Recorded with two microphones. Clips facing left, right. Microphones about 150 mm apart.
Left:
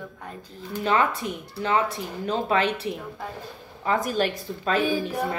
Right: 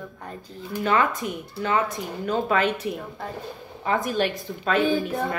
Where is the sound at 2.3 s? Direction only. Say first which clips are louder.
Right 1 dB; 30° left (ahead or behind).